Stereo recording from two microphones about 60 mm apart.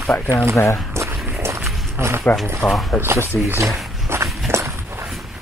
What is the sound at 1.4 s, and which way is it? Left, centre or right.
Walk, right.